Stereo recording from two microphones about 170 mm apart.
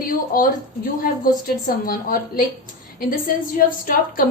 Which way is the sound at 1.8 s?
55° left (ahead or behind).